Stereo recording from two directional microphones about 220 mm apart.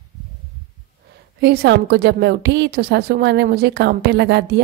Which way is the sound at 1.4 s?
50° right (ahead or behind).